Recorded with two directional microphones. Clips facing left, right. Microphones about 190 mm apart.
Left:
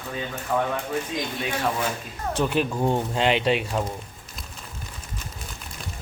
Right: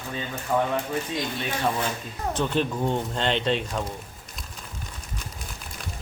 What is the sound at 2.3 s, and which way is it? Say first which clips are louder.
Speech: left 2 dB; 10° left (ahead or behind).